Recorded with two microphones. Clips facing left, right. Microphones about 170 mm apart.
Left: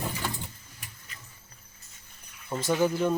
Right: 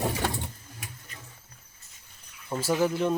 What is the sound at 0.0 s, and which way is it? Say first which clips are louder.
Sewing machine: right 5 dB; 75° right (ahead or behind).